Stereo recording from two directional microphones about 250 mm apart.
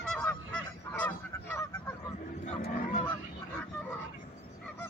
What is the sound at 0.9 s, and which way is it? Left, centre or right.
Honk, centre.